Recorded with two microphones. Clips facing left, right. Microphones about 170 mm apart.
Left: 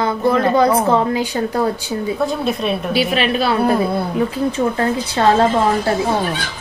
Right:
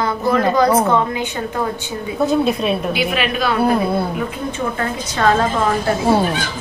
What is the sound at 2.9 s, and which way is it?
Speech, 35° left (ahead or behind).